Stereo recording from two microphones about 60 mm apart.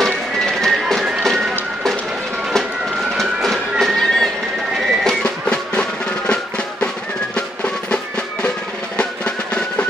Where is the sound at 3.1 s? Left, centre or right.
Centre.